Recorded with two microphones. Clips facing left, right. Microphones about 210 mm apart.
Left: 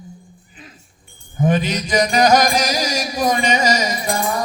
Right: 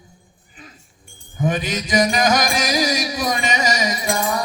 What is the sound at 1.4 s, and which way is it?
Mantra, 45° left (ahead or behind).